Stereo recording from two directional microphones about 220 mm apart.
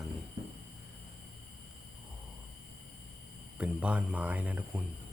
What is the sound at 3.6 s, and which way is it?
Speech, 5° right (ahead or behind).